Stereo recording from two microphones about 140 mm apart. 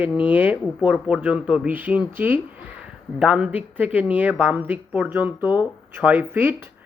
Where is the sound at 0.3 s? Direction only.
10° right (ahead or behind).